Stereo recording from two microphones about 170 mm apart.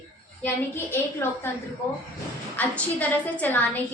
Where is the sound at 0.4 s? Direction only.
10° left (ahead or behind).